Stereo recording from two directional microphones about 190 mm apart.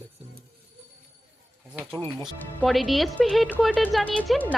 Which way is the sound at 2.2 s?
Centre (ahead or behind).